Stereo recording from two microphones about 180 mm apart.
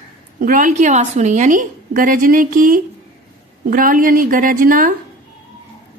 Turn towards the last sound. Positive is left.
turn(degrees=-50)  # may be behind; listen again after turning